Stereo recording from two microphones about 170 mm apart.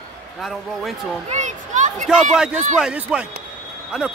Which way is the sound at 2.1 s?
5° right (ahead or behind).